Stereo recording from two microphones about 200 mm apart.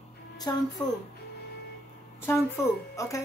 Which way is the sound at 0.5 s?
20° left (ahead or behind).